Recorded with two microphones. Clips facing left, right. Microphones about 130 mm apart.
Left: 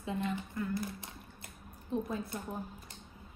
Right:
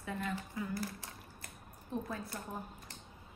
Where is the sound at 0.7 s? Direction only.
20° left (ahead or behind).